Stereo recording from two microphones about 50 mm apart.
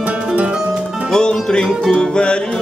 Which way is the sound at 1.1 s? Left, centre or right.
Centre.